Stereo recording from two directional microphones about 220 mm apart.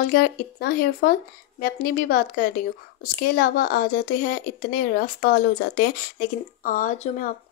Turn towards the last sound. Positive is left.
turn(degrees=35)  # may be behind; listen again after turning